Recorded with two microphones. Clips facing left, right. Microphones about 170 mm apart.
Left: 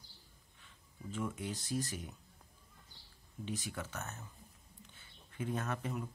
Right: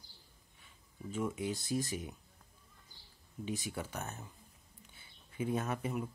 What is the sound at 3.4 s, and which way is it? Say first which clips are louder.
Speech: right 2 dB; 10° right (ahead or behind).